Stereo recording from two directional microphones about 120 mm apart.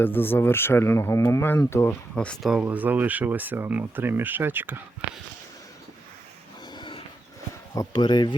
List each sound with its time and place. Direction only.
0.0 s speech: 15° left (ahead or behind)
2.1 s speech: 5° left (ahead or behind)
2.5 s speech: 10° right (ahead or behind)
6.7 s a sound: 40° left (ahead or behind)
7.8 s speech: 40° left (ahead or behind)